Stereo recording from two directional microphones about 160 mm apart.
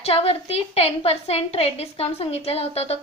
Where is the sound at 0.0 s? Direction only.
40° left (ahead or behind).